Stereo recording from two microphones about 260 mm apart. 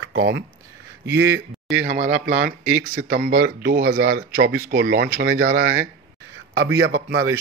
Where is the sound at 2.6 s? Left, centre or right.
Centre.